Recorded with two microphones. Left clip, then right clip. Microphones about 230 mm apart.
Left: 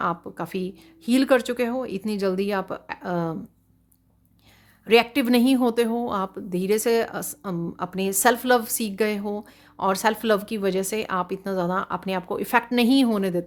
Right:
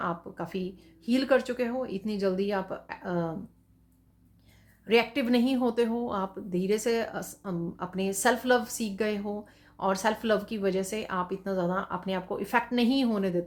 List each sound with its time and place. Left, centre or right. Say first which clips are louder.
0.0 s a woman's voice: left 6 dB; left
4.9 s a woman's voice: left 6 dB; left